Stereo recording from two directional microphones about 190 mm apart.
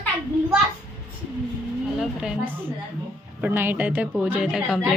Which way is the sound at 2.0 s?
5° right (ahead or behind).